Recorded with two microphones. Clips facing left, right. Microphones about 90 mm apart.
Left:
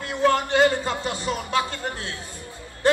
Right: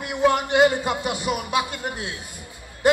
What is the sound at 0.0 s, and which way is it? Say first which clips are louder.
A man's voice: right 1 dB; 15° right (ahead or behind).